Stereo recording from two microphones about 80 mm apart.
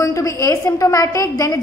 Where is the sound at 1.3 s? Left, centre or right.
Left.